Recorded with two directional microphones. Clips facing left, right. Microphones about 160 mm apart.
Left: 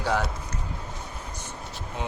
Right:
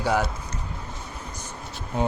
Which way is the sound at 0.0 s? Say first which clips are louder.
Right 3 dB; 10° right (ahead or behind).